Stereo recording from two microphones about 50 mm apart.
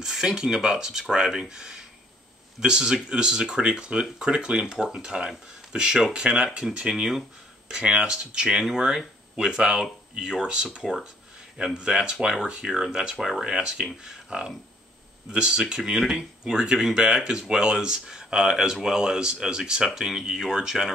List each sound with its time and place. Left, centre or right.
0.0 s speech: centre